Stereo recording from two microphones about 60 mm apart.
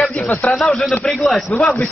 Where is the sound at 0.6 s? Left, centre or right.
Centre.